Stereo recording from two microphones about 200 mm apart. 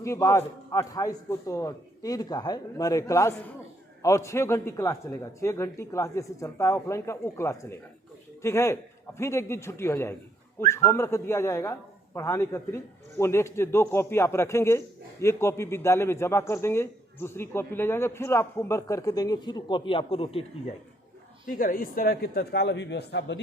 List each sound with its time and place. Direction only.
0.0 s speech: 15° left (ahead or behind)
21.4 s a man's voice: 45° left (ahead or behind); by 23.4 s 60° left (ahead or behind)